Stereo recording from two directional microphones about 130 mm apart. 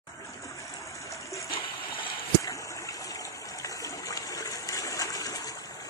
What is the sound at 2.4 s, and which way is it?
Stream, 25° left (ahead or behind).